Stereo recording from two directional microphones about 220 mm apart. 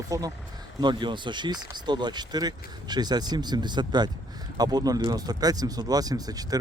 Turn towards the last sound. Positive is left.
turn(degrees=-15)  # may be behind; listen again after turning